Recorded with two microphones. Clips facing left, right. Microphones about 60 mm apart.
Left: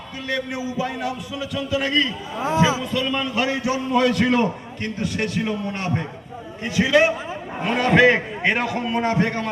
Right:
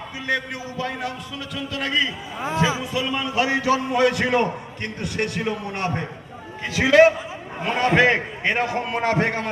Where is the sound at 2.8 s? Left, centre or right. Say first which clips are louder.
Left 1 dB; centre.